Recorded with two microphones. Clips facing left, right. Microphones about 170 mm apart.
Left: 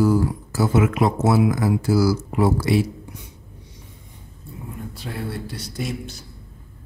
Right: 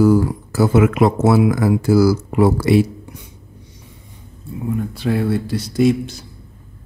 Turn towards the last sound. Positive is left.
turn(degrees=-90)